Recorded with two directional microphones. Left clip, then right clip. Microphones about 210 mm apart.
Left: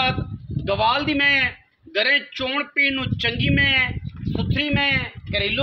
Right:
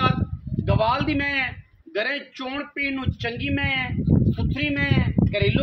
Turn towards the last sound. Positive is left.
turn(degrees=35)  # may be behind; listen again after turning